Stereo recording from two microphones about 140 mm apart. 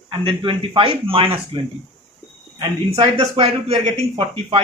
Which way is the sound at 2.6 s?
35° right (ahead or behind).